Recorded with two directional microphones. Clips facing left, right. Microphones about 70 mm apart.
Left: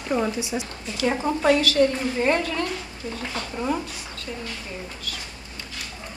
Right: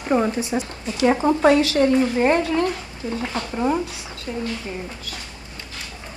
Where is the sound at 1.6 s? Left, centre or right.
Right.